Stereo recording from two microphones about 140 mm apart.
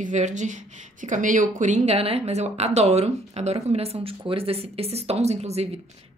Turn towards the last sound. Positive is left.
turn(degrees=-50)  # may be behind; listen again after turning